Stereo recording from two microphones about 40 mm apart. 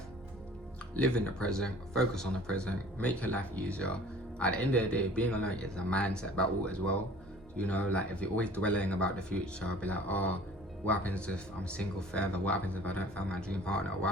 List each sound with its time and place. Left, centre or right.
0.9 s speech: left
9.8 s speech: left
12.5 s speech: left
13.1 s speech: left